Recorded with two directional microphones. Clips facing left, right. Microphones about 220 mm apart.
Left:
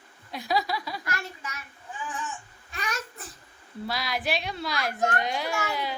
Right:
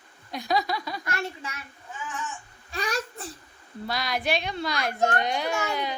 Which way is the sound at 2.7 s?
35° right (ahead or behind).